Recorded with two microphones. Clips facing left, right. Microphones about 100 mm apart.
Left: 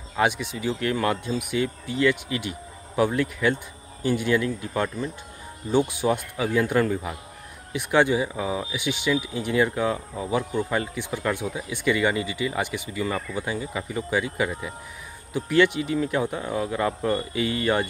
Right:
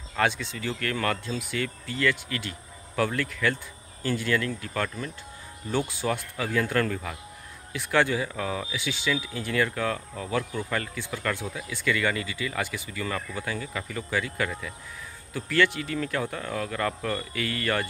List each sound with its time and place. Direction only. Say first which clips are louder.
0.1 s speech: left 3 dB; 15° left (ahead or behind)